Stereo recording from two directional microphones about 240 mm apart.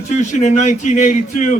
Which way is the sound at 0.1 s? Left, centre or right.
Left.